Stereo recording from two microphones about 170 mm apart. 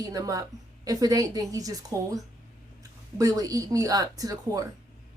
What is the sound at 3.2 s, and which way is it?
A woman's voice, 20° right (ahead or behind).